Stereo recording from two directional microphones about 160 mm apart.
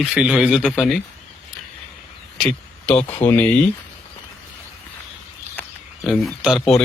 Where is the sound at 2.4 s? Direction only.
5° left (ahead or behind).